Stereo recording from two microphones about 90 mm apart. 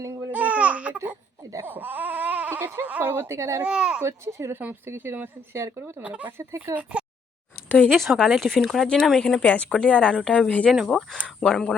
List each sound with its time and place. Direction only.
0.3 s laughter: 15° right (ahead or behind)
1.6 s speech: 20° right (ahead or behind)
3.6 s speech: 10° right (ahead or behind)
4.0 s speech: 30° right (ahead or behind); by 6.3 s 15° right (ahead or behind)
6.3 s speech: 30° right (ahead or behind)
6.9 s a sound: 15° right (ahead or behind)
7.9 s speech: centre (ahead or behind)